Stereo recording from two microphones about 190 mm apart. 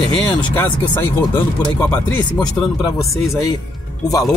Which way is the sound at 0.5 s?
10° left (ahead or behind).